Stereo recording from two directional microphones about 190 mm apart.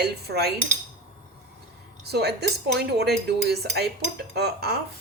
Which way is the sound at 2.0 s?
60° right (ahead or behind).